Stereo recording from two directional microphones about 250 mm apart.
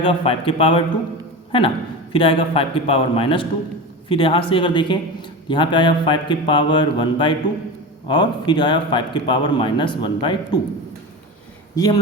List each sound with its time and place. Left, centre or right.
0.0 s a man's voice: left
11.7 s a man's voice: centre